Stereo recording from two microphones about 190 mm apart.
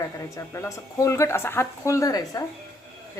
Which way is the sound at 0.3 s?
15° left (ahead or behind).